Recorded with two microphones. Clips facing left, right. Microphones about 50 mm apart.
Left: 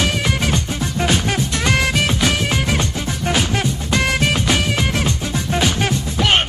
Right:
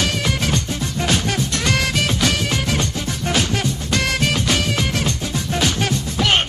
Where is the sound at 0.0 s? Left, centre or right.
Centre.